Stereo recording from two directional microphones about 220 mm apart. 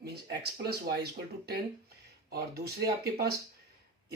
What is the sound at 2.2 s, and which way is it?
Speech, 45° right (ahead or behind).